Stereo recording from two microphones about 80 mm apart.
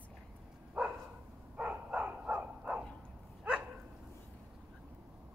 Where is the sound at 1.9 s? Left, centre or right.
Centre.